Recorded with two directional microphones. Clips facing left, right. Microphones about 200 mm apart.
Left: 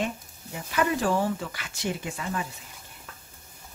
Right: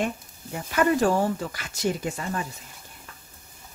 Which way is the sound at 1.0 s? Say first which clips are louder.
Right 3 dB; 45° right (ahead or behind).